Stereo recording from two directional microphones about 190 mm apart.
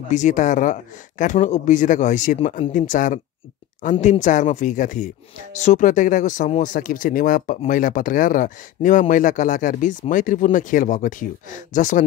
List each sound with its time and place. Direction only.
0.1 s speech: 40° left (ahead or behind)